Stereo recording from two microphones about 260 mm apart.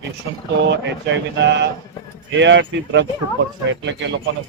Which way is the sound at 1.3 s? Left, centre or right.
Right.